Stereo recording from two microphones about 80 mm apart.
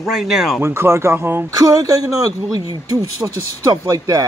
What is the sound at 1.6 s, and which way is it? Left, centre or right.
Speech, right.